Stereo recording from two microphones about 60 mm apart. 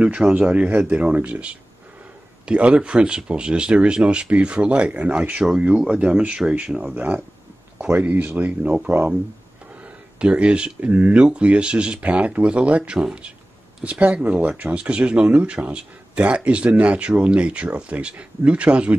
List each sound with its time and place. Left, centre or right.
0.0 s speech: centre
10.1 s speech: centre